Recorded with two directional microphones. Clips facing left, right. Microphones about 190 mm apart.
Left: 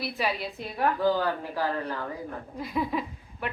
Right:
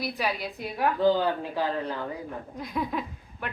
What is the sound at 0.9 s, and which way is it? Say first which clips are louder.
Speech: right 5 dB; 20° right (ahead or behind).